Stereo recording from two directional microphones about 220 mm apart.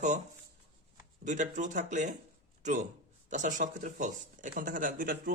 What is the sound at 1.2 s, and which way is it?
A man's voice, 35° right (ahead or behind).